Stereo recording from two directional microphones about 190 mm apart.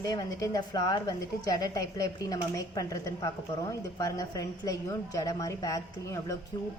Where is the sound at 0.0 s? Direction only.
20° left (ahead or behind).